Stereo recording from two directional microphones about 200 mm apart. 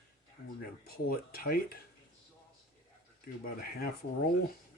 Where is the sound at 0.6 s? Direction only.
50° left (ahead or behind).